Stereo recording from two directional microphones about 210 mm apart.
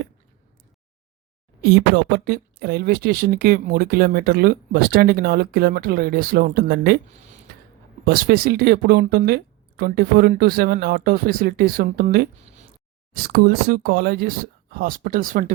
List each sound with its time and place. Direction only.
1.6 s speech: 50° right (ahead or behind)
8.0 s speech: 45° right (ahead or behind)